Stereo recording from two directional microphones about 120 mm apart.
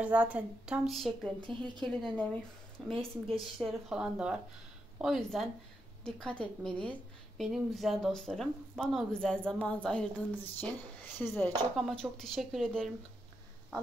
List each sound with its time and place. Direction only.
0.0 s a woman's voice: 10° right (ahead or behind); by 2.2 s 5° left (ahead or behind)
2.9 s speech: 50° right (ahead or behind)
3.3 s a woman's voice: 5° right (ahead or behind); by 11.5 s 15° left (ahead or behind)
11.7 s a woman's voice: 5° left (ahead or behind)